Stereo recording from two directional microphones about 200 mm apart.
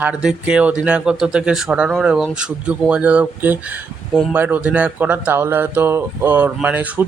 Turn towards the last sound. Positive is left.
turn(degrees=-10)  # may be behind; listen again after turning